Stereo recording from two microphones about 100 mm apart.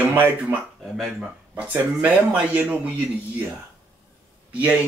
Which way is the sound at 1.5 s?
20° right (ahead or behind).